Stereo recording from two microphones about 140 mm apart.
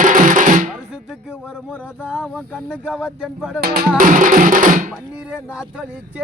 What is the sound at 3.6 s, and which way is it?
Music, 90° right.